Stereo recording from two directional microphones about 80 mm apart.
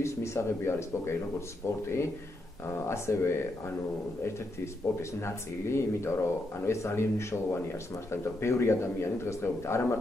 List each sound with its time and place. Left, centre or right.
0.0 s speech: left
5.2 s speech: left